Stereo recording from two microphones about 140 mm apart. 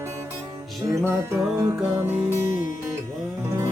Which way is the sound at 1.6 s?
15° right (ahead or behind).